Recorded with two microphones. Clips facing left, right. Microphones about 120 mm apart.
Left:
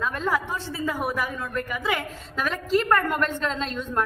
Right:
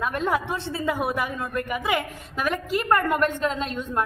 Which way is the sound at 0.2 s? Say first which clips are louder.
Right 1 dB; 20° right (ahead or behind).